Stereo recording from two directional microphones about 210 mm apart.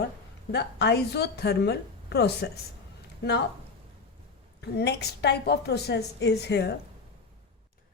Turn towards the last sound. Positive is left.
turn(degrees=55)  # may be behind; listen again after turning